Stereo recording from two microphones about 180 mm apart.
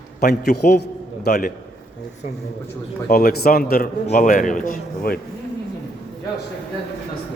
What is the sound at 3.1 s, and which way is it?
A man's voice, 60° left (ahead or behind).